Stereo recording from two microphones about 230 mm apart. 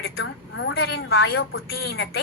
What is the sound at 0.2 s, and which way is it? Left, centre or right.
A woman's voice, left.